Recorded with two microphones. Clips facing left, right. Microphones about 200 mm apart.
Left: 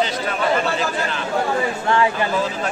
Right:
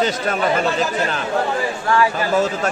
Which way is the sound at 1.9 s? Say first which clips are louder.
Right 1 dB; 25° left (ahead or behind).